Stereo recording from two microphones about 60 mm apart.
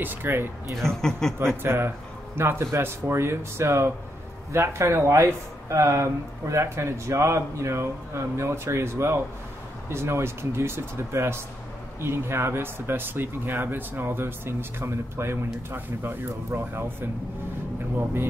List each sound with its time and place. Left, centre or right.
0.0 s speech: right
0.8 s speech: centre
1.4 s speech: right